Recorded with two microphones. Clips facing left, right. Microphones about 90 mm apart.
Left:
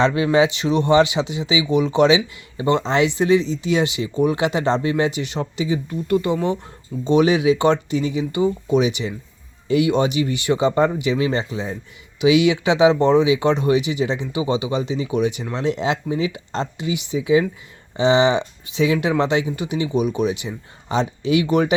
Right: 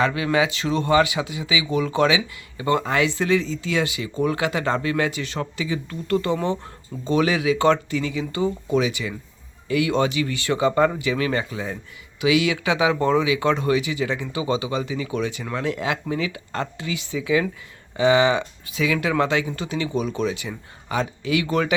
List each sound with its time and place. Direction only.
0.0 s speech: 25° left (ahead or behind)